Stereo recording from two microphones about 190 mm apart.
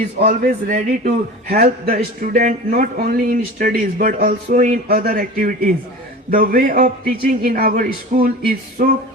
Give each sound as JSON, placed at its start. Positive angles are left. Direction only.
{"t": 0.2, "sound": "a man's voice", "side_deg": -45}